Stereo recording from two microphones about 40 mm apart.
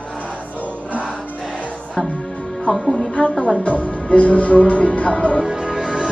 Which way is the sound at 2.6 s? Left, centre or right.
Centre.